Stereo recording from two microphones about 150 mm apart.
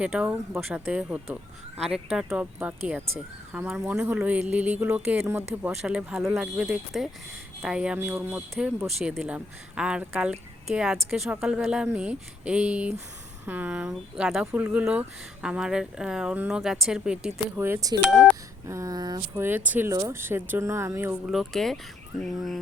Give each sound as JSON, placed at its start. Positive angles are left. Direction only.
{"t": 0.0, "sound": "speech", "side_deg": -5}
{"t": 17.6, "sound": "speech", "side_deg": -20}
{"t": 18.0, "sound": "speech", "side_deg": 10}
{"t": 18.7, "sound": "speech", "side_deg": -25}
{"t": 19.4, "sound": "speech", "side_deg": -15}
{"t": 21.2, "sound": "speech", "side_deg": 0}